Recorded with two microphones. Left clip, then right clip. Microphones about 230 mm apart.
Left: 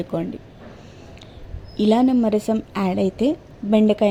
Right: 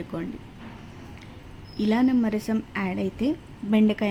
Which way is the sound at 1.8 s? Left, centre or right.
Centre.